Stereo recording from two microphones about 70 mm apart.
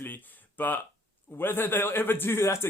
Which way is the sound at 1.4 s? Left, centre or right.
Left.